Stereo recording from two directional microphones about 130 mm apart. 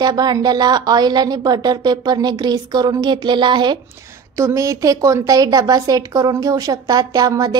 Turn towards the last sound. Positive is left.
turn(degrees=-30)  # may be behind; listen again after turning